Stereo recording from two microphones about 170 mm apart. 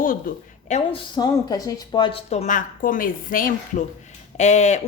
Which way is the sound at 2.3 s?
45° left (ahead or behind).